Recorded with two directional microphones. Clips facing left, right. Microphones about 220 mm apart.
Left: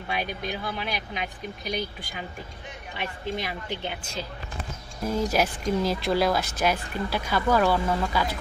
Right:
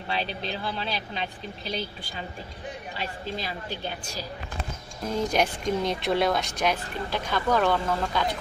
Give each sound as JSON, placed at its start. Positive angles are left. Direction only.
{"t": 0.1, "sound": "a woman's voice", "side_deg": 15}
{"t": 5.3, "sound": "speech", "side_deg": 5}